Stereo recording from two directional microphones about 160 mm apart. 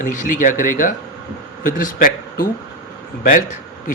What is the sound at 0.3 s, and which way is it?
Speech, 55° left (ahead or behind).